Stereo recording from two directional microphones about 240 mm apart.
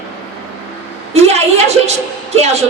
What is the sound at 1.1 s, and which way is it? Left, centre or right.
Speech, right.